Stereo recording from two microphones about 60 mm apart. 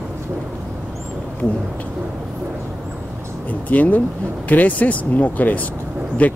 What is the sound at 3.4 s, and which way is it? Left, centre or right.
Speech, left.